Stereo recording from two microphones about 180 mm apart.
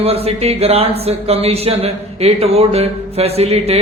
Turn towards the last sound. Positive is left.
turn(degrees=-35)  # may be behind; listen again after turning